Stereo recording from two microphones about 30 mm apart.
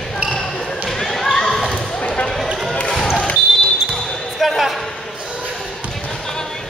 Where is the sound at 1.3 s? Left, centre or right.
Left.